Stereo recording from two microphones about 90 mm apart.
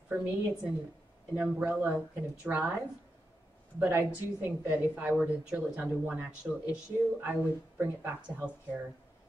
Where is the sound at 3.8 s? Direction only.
25° right (ahead or behind).